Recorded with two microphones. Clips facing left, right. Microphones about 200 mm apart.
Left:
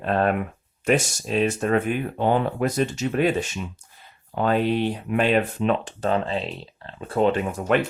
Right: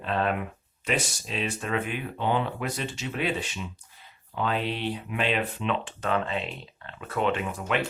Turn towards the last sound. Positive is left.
turn(degrees=45)  # may be behind; listen again after turning